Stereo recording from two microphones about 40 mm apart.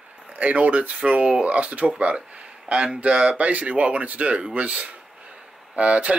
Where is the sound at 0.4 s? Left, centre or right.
Right.